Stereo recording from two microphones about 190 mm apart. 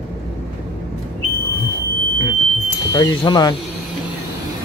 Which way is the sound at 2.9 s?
20° left (ahead or behind).